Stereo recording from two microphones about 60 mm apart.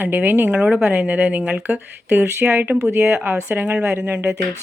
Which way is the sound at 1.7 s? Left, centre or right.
Right.